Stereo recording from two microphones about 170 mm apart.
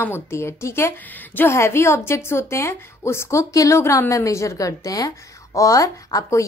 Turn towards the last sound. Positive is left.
turn(degrees=20)  # may be behind; listen again after turning